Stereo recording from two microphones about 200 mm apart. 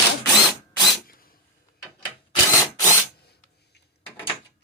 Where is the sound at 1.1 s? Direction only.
45° left (ahead or behind).